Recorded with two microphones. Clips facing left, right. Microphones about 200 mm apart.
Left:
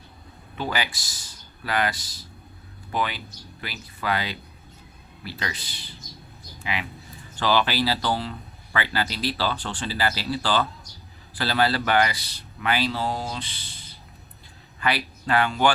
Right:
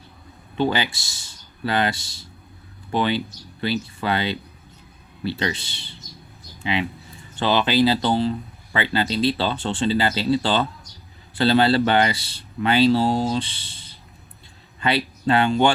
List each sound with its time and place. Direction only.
0.5 s speech: 25° right (ahead or behind)
7.3 s speech: 20° right (ahead or behind)